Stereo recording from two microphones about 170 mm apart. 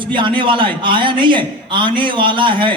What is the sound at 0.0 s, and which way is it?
A man's voice, 30° right (ahead or behind).